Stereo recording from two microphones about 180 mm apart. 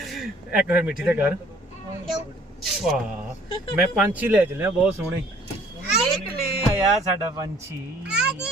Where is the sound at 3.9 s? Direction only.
10° right (ahead or behind).